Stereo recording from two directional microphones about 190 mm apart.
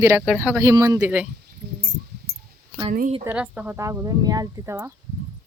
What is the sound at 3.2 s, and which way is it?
Speech, 5° right (ahead or behind).